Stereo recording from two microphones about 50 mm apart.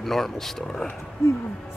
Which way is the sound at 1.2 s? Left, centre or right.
Left.